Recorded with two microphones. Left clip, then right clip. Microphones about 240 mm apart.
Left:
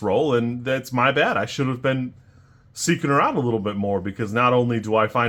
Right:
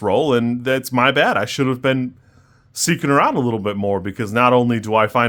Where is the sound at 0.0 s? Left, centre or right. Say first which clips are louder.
Right 3 dB; right.